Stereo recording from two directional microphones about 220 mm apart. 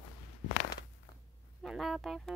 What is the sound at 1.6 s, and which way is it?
Speech, centre (ahead or behind).